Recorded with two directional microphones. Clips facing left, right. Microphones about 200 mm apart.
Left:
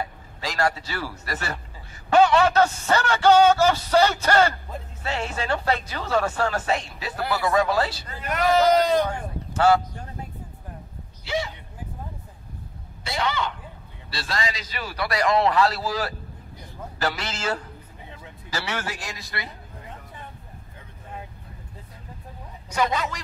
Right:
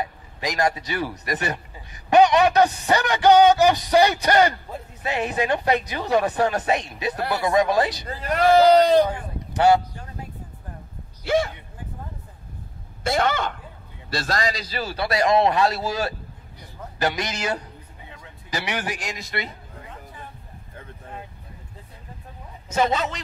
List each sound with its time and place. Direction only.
0.0 s a man's voice: 20° right (ahead or behind)
8.2 s speech: 35° right (ahead or behind)
9.0 s speech: 15° right (ahead or behind)
11.2 s speech: 50° right (ahead or behind)
13.0 s a man's voice: 50° right (ahead or behind); by 19.5 s 20° right (ahead or behind)
22.7 s a man's voice: 25° right (ahead or behind)